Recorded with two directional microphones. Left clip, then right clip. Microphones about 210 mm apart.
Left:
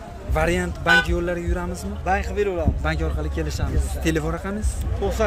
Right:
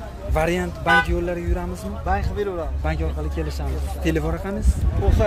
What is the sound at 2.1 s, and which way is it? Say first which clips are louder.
Speech: left 2 dB; 35° left (ahead or behind).